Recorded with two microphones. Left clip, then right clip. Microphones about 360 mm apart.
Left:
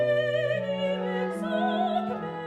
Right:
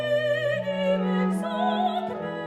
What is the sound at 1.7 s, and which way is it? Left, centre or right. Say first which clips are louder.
Opera: right 1 dB; right.